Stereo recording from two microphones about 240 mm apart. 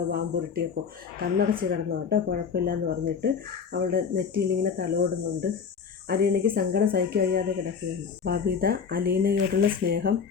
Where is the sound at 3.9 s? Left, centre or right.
Right.